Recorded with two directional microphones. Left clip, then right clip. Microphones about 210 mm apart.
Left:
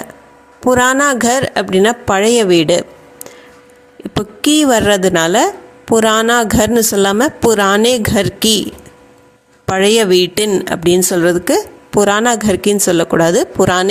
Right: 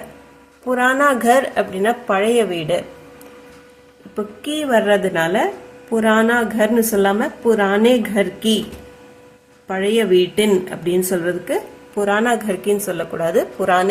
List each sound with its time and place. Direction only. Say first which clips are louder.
0.7 s speech: left 4 dB; 45° left (ahead or behind)
4.4 s speech: left 6 dB; 50° left (ahead or behind)
9.7 s speech: left 5 dB; 50° left (ahead or behind)